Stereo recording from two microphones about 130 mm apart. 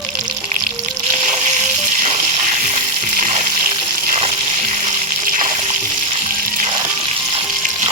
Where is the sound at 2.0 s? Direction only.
65° right (ahead or behind).